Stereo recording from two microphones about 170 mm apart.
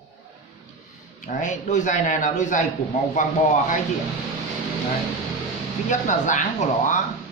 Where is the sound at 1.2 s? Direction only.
45° left (ahead or behind).